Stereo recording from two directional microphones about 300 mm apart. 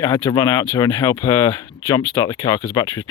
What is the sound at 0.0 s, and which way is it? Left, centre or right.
Speech, centre.